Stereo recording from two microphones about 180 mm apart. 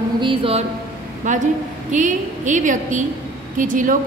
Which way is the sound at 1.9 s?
45° right (ahead or behind).